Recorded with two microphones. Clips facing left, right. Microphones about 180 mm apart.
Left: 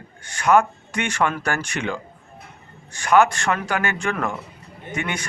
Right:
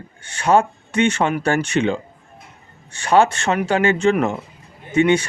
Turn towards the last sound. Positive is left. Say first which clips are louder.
# right 12 dB
turn(degrees=-25)  # may be behind; listen again after turning